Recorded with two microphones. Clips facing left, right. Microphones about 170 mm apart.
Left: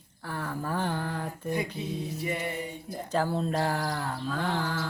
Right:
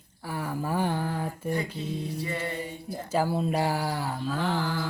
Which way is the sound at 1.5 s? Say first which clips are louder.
Left 2 dB; 15° left (ahead or behind).